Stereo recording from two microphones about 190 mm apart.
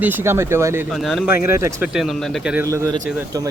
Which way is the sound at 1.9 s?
Centre (ahead or behind).